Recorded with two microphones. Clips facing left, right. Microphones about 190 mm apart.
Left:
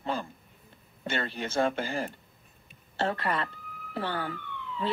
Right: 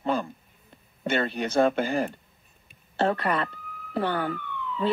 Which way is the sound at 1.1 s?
55° right (ahead or behind).